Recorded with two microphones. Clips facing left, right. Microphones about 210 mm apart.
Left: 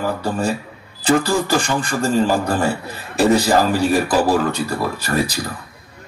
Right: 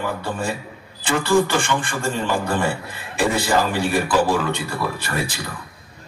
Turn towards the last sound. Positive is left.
turn(degrees=40)  # may be behind; listen again after turning